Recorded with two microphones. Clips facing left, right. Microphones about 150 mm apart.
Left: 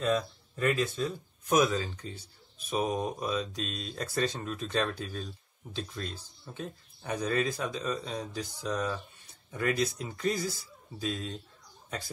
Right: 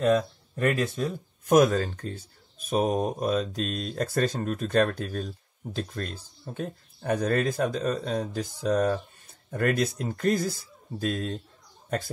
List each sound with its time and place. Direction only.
0.0 s speech: 50° right (ahead or behind)